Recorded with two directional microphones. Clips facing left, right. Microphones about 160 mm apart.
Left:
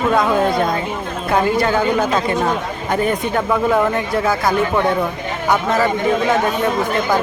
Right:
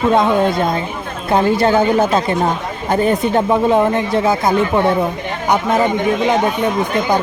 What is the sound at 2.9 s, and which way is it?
Speech, 25° right (ahead or behind).